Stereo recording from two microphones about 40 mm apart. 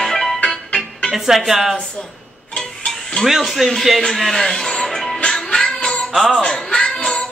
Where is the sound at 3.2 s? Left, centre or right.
Centre.